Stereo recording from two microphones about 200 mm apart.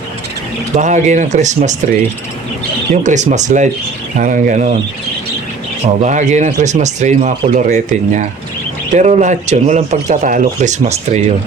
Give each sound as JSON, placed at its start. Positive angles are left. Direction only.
{"t": 0.8, "sound": "speech", "side_deg": -35}
{"t": 6.0, "sound": "speech", "side_deg": -35}